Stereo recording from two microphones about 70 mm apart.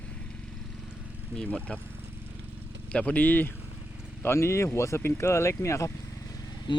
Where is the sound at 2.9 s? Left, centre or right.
Centre.